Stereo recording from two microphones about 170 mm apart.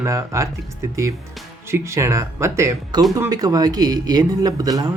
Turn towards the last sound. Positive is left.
turn(degrees=-20)  # may be behind; listen again after turning